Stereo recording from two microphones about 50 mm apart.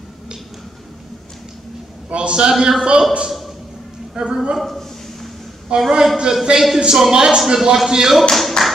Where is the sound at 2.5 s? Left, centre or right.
Centre.